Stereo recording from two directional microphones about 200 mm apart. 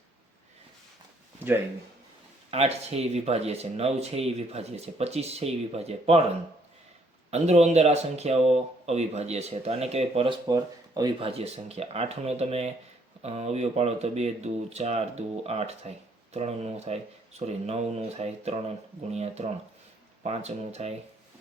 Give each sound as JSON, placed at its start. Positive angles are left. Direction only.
{"t": 2.5, "sound": "speech", "side_deg": -30}
{"t": 10.5, "sound": "speech", "side_deg": -20}